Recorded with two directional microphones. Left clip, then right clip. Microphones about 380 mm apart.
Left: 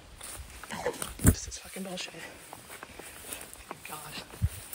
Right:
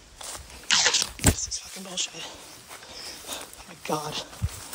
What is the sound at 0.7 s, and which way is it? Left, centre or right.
Crunch, left.